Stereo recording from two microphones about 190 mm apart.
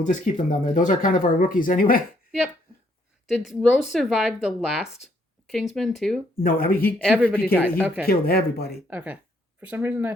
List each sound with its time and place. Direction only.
0.1 s speech: 40° left (ahead or behind)
3.2 s speech: centre (ahead or behind)
6.4 s speech: 50° left (ahead or behind)
7.0 s speech: 5° right (ahead or behind)
8.0 s speech: 50° left (ahead or behind)
8.9 s speech: 10° right (ahead or behind)